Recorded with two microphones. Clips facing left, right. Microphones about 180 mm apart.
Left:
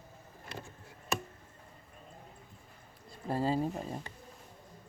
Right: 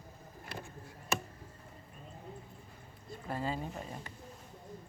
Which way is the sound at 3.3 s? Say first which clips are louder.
Left 6 dB; 40° left (ahead or behind).